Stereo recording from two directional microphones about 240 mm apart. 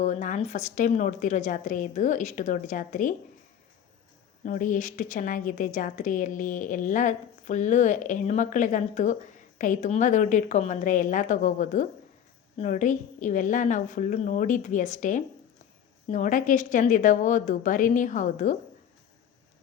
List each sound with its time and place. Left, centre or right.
0.0 s a woman's voice: left
4.4 s a woman's voice: left